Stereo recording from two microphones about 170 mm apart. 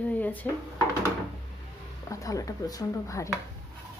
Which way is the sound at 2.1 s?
20° left (ahead or behind).